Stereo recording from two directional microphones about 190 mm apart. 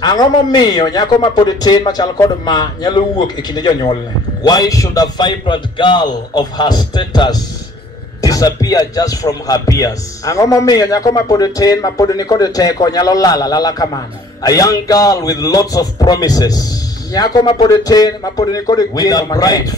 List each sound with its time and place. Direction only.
0.0 s speech: 20° left (ahead or behind)